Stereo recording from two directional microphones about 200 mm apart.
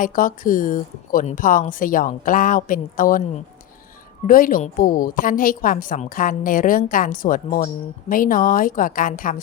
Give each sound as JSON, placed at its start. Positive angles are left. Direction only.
{"t": 0.0, "sound": "a woman's voice", "side_deg": 45}
{"t": 4.3, "sound": "a woman's voice", "side_deg": 45}